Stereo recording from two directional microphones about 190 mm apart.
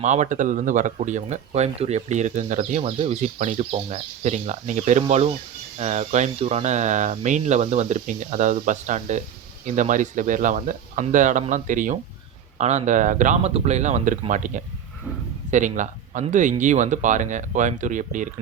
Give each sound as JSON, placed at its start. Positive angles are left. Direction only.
{"t": 0.0, "sound": "speech", "side_deg": -40}